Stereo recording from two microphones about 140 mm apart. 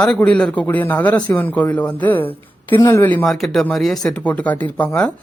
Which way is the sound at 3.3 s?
Centre (ahead or behind).